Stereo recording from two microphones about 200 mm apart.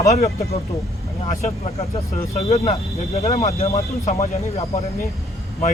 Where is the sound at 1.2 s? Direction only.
35° left (ahead or behind).